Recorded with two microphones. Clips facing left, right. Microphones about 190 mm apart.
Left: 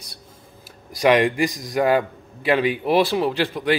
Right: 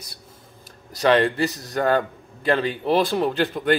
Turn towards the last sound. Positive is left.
turn(degrees=0)  # may be behind; listen again after turning